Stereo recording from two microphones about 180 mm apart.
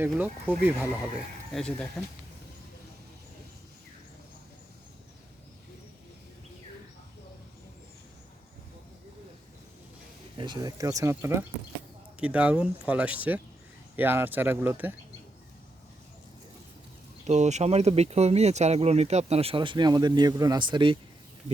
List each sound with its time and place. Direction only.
0.0 s speech: 10° right (ahead or behind)
1.5 s speech: centre (ahead or behind)
10.3 s speech: 25° right (ahead or behind)
17.2 s speech: 40° right (ahead or behind)